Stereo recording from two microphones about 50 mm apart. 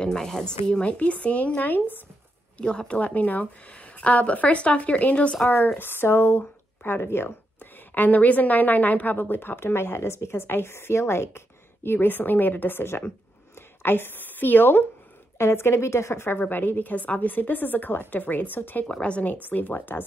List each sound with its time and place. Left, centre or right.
0.0 s speech: centre; by 2.0 s left
2.5 s speech: centre
3.2 s speech: left
5.8 s speech: left
7.9 s speech: left
15.3 s a woman's voice: left
16.3 s a woman's voice: left
18.9 s speech: left
19.4 s a woman's voice: left